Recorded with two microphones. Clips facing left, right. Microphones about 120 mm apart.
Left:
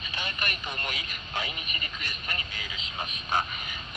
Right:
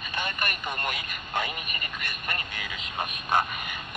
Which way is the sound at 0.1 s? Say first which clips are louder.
Right 4 dB; 55° right (ahead or behind).